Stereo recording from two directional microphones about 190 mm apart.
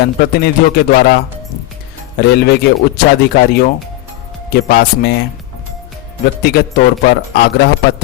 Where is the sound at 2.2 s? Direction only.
55° left (ahead or behind).